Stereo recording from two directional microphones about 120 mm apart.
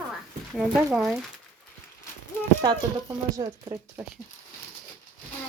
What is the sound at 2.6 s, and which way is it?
Speech, 35° right (ahead or behind).